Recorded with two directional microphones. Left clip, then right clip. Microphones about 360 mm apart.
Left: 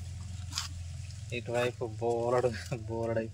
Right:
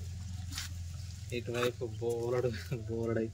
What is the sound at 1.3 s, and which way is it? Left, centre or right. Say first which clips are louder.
Speech: left 2 dB; centre.